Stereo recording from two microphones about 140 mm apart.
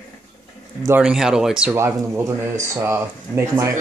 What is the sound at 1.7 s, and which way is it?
Speech, 20° right (ahead or behind).